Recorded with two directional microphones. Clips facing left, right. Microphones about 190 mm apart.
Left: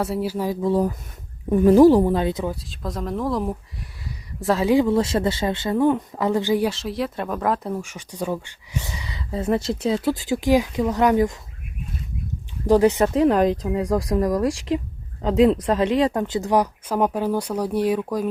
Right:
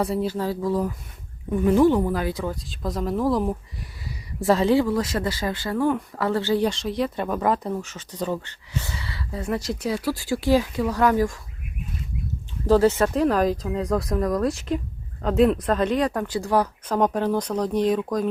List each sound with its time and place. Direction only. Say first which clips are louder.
0.0 s speech: even; 5° left (ahead or behind)
0.7 s speech: left 4 dB; 30° left (ahead or behind)
2.6 s speech: right 2 dB; centre (ahead or behind)
4.6 s speech: left 2 dB; 15° left (ahead or behind)
6.7 s speech: right 1 dB; 5° left (ahead or behind)
7.8 s speech: left 1 dB; 10° left (ahead or behind)
12.6 s speech: left 1 dB; 15° left (ahead or behind)